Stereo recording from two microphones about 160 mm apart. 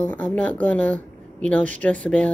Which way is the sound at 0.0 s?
10° left (ahead or behind).